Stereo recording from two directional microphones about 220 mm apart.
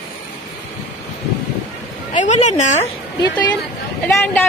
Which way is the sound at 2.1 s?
35° left (ahead or behind).